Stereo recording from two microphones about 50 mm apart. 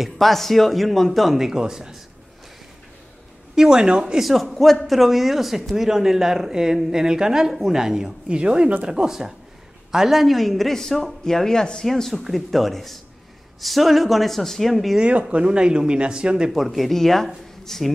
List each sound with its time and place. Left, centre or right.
0.0 s speech: centre
3.5 s speech: centre
4.3 s speech: centre
8.3 s speech: right; by 15.0 s centre
15.0 s speech: right
16.5 s speech: centre